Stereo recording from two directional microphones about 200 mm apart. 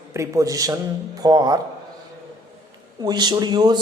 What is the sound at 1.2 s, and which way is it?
Speech, 20° right (ahead or behind).